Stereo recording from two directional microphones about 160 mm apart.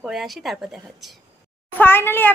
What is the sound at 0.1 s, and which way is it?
Speech, centre (ahead or behind).